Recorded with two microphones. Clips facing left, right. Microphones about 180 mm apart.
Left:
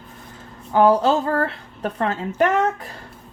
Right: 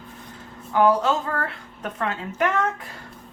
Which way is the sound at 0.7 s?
30° left (ahead or behind).